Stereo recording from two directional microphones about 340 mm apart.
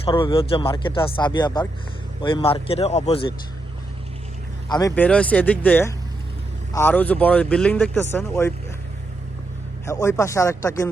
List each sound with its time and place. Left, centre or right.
0.0 s speech: centre
4.7 s speech: centre
9.8 s speech: centre